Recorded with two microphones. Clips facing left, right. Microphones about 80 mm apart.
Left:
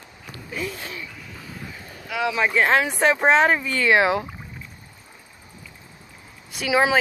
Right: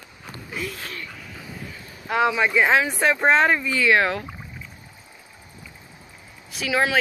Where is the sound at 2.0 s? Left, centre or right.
Right.